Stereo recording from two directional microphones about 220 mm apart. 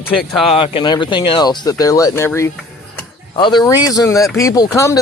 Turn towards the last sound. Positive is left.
turn(degrees=15)  # may be behind; listen again after turning